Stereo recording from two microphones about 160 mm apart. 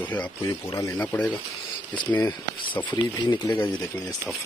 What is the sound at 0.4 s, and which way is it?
Speech, 20° left (ahead or behind).